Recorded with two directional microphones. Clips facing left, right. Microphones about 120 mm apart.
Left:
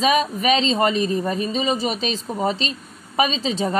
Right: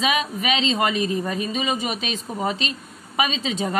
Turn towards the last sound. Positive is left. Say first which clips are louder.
# left 3 dB
turn(degrees=30)  # may be behind; listen again after turning